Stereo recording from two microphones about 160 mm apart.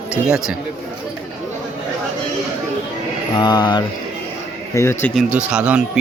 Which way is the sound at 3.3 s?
25° left (ahead or behind).